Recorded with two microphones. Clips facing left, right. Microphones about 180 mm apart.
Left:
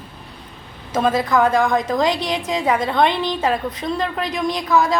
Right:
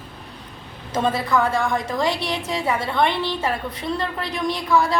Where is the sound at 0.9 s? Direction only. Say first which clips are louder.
Left 3 dB; 15° left (ahead or behind).